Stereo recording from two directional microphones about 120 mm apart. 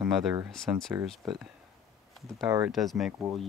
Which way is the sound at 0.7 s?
15° right (ahead or behind).